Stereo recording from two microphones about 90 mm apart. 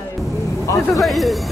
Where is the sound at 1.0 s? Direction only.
Centre (ahead or behind).